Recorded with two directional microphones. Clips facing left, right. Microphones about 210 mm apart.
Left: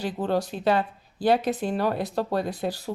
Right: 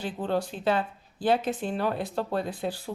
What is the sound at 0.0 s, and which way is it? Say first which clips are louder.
Speech: left 3 dB; 40° left (ahead or behind).